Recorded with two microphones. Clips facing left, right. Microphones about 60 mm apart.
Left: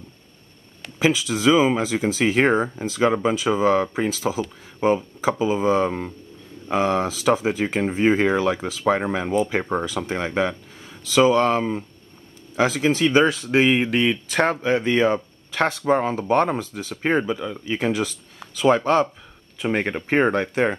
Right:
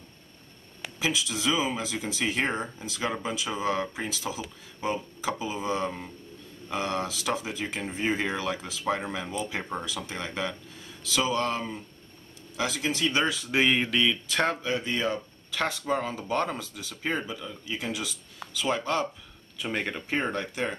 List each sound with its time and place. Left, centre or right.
0.9 s speech: left
2.5 s speech: left
3.5 s speech: left